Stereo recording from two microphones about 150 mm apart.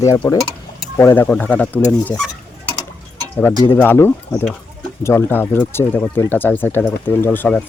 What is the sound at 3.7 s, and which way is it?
Speech, 15° left (ahead or behind).